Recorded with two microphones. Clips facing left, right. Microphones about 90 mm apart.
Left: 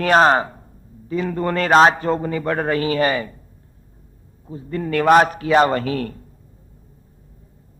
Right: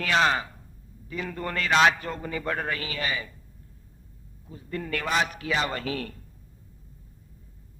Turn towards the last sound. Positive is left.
turn(degrees=45)  # may be behind; listen again after turning